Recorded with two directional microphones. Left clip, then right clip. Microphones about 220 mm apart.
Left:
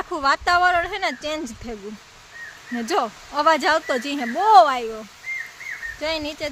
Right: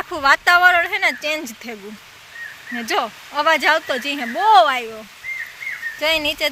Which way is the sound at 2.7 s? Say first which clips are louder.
Right 1 dB; 20° left (ahead or behind).